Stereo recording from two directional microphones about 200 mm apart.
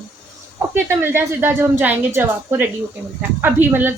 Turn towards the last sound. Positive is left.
turn(degrees=-10)  # may be behind; listen again after turning